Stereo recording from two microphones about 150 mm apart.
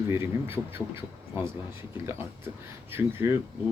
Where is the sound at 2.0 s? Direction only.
15° right (ahead or behind).